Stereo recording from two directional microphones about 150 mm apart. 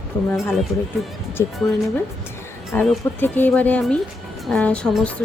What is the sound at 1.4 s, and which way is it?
Speech, 20° left (ahead or behind).